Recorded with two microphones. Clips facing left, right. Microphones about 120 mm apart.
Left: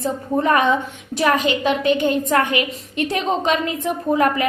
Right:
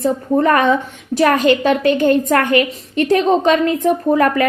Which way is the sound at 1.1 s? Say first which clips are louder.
Right 5 dB; 45° right (ahead or behind).